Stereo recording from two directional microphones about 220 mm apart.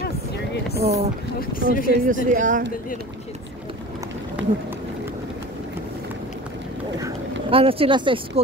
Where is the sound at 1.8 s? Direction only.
40° right (ahead or behind).